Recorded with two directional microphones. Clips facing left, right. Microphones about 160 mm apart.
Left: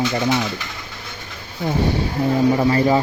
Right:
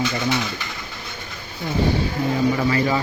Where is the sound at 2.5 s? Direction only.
30° left (ahead or behind).